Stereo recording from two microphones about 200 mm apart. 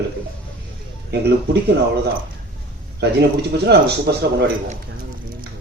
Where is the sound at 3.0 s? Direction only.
55° right (ahead or behind).